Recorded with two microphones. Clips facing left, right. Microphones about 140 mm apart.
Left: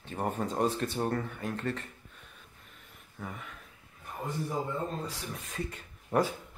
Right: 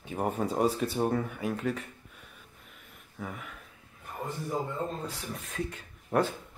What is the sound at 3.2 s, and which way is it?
Speech, centre (ahead or behind).